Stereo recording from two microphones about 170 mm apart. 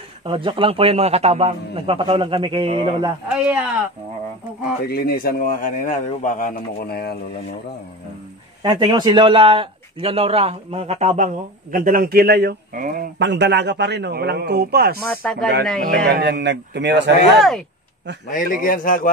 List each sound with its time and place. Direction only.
0.2 s a man's voice: 30° right (ahead or behind)
3.3 s speech: 10° right (ahead or behind)
4.8 s a man's voice: 65° left (ahead or behind)
8.6 s a man's voice: 25° right (ahead or behind); by 13.1 s 55° right (ahead or behind)
13.2 s a man's voice: 90° right; by 15.0 s 70° right (ahead or behind)
15.2 s speech: 5° left (ahead or behind)
16.1 s a man's voice: 75° right (ahead or behind); by 17.1 s 90° right
17.4 s speech: centre (ahead or behind)
18.3 s a man's voice: 50° left (ahead or behind)